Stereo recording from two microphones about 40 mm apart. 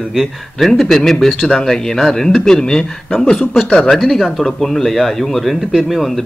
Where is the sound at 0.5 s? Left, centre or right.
Centre.